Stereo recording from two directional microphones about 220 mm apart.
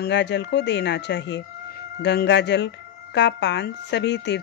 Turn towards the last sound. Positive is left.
turn(degrees=50)  # may be behind; listen again after turning